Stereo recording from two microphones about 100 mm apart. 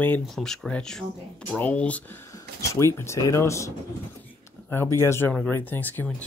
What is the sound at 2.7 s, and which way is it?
Speech, 30° left (ahead or behind).